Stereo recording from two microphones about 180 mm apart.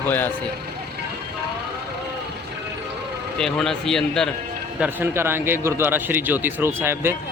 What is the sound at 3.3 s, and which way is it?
Speech, 5° left (ahead or behind).